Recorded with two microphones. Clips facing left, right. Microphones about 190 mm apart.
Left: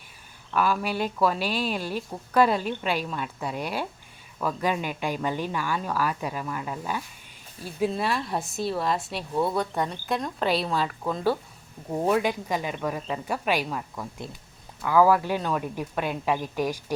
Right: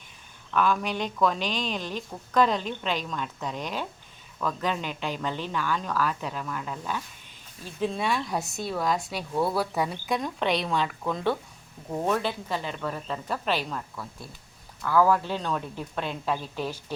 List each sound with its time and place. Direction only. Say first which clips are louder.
0.5 s speech: even; 5° left (ahead or behind)